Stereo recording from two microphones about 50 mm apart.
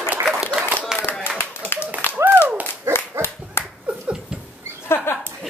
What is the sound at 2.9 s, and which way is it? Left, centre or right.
Dog, right.